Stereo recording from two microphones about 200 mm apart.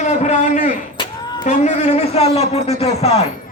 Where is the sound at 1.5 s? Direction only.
35° left (ahead or behind).